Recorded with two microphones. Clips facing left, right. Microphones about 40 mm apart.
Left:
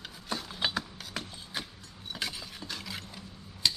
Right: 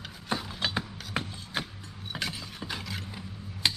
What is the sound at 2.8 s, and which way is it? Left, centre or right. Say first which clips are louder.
Vehicle: right 2 dB; centre.